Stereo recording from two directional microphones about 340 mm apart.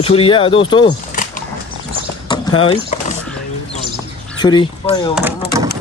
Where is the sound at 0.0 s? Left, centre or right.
Centre.